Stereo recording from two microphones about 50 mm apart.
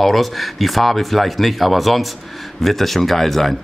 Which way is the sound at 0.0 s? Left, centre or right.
Centre.